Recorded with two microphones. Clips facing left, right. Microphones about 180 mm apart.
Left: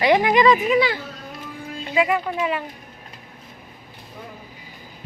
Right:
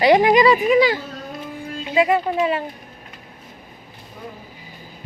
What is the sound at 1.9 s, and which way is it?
Speech, 30° right (ahead or behind).